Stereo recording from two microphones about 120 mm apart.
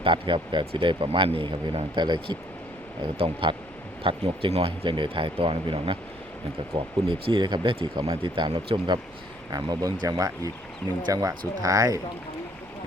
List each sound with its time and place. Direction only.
0.0 s a man's voice: 45° right (ahead or behind)
3.2 s a man's voice: 50° right (ahead or behind); by 11.9 s 30° right (ahead or behind)